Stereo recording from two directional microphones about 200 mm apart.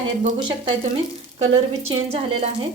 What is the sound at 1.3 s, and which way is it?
Speech, 30° right (ahead or behind).